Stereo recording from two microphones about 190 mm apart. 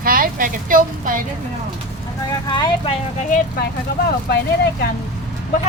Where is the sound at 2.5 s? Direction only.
25° left (ahead or behind).